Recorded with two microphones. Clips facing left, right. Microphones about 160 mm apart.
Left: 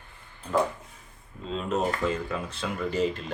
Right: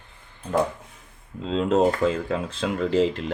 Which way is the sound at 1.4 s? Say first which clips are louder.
Right 8 dB; 90° right.